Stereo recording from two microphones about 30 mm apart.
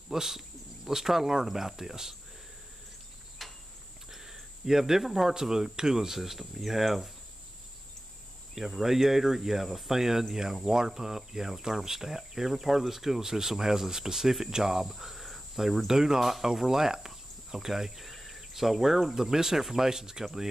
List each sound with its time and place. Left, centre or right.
0.1 s speech: centre
3.4 s a sound: centre
4.1 s speech: centre
8.5 s speech: centre
15.9 s speech: centre
16.2 s speech: centre